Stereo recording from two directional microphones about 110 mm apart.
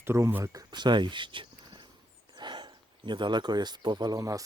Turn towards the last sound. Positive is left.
turn(degrees=-30)  # may be behind; listen again after turning